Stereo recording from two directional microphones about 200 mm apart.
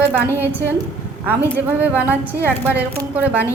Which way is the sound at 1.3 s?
10° right (ahead or behind).